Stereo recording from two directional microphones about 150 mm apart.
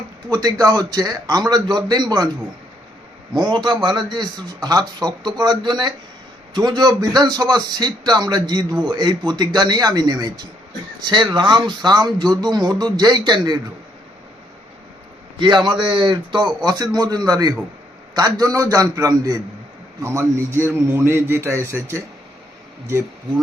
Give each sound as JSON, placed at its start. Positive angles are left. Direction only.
{"t": 0.3, "sound": "a man's voice", "side_deg": -25}
{"t": 3.3, "sound": "a man's voice", "side_deg": -30}
{"t": 15.4, "sound": "a man's voice", "side_deg": -30}